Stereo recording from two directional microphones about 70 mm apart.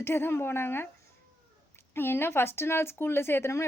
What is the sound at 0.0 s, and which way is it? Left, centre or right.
Speech, left.